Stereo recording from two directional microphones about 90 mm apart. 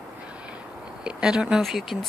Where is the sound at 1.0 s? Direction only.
10° right (ahead or behind).